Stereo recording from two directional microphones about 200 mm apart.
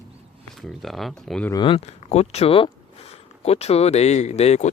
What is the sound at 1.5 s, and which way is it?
Speech, 25° left (ahead or behind).